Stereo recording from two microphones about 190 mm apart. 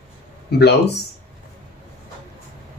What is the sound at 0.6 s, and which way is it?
Speech, 60° left (ahead or behind).